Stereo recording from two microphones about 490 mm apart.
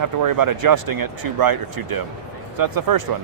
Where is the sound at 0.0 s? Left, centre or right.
Right.